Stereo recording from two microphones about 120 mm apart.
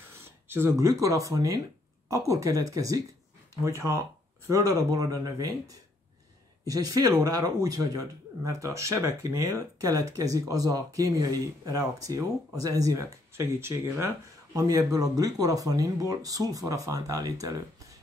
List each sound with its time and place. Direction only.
0.5 s speech: 20° right (ahead or behind)
6.6 s speech: 30° right (ahead or behind)